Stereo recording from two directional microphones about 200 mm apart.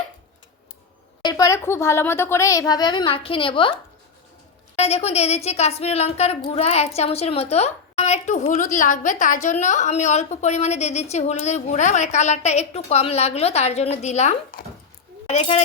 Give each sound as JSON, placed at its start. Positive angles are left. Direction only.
{"t": 1.2, "sound": "speech", "side_deg": 20}
{"t": 4.8, "sound": "speech", "side_deg": 30}